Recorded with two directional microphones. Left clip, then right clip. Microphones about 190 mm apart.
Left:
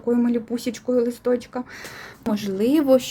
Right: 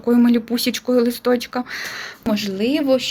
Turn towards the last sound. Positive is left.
turn(degrees=30)  # may be behind; listen again after turning